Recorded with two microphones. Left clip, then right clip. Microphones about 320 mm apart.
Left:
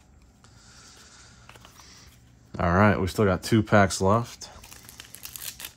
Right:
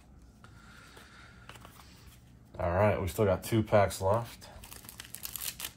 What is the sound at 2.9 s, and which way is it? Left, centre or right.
Speech, left.